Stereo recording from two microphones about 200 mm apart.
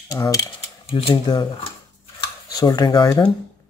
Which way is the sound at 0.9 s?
25° left (ahead or behind).